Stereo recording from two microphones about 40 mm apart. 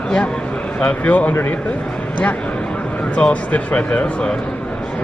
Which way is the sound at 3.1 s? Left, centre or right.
Left.